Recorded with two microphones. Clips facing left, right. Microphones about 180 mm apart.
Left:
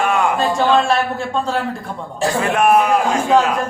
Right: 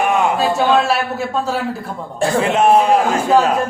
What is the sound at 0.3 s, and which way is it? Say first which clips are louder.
A man's voice: right 1 dB; 5° right (ahead or behind).